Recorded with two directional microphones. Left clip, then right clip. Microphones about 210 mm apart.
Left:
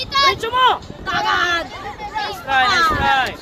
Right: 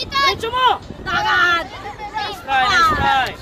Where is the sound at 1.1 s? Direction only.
Centre (ahead or behind).